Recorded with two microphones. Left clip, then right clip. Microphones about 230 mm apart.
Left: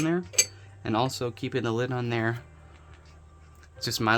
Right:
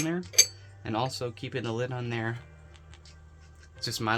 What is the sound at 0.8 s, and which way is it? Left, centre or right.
Speech, left.